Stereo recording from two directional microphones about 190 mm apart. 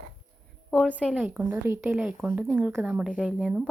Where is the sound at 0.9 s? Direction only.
5° right (ahead or behind).